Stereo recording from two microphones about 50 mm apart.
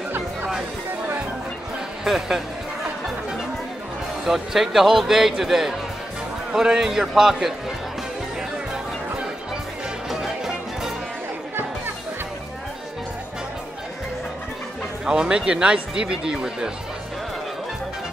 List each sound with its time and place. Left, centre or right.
2.0 s speech: centre
4.3 s speech: centre
10.0 s music: centre
15.0 s speech: centre